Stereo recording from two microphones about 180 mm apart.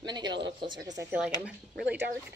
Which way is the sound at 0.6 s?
25° right (ahead or behind).